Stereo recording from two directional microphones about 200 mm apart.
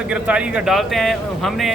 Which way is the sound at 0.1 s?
5° right (ahead or behind).